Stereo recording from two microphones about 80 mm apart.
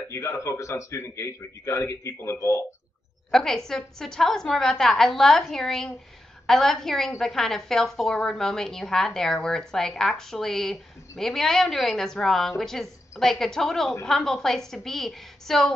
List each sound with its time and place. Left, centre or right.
0.1 s a man's voice: left
3.3 s a woman's voice: centre